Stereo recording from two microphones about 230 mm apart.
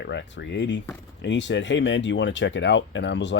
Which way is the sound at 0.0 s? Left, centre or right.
Left.